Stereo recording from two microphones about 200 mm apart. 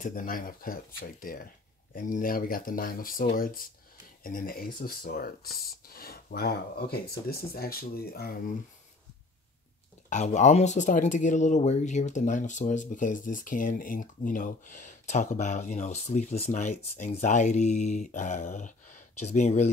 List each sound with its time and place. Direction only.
0.0 s speech: 45° left (ahead or behind)
10.0 s speech: 35° left (ahead or behind)